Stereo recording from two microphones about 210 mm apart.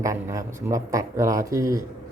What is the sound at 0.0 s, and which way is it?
Speech, 15° right (ahead or behind).